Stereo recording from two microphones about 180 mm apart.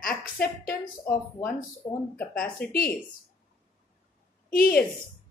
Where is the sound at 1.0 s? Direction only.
5° left (ahead or behind).